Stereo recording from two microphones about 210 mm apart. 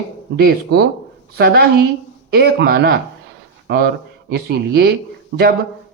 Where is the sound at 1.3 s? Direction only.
50° right (ahead or behind).